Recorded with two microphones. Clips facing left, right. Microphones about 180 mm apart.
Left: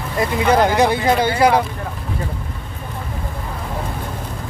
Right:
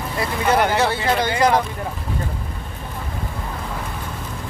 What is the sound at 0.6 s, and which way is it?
Speech, 15° left (ahead or behind).